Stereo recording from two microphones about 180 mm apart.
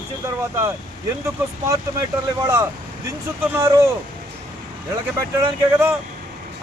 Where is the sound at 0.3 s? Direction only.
15° right (ahead or behind).